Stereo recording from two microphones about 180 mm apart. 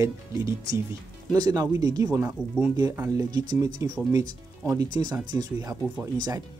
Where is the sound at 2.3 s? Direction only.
5° right (ahead or behind).